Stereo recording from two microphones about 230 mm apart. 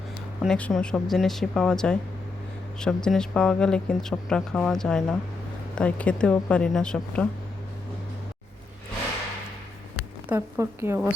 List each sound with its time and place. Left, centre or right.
0.4 s speech: centre
10.2 s a woman's voice: centre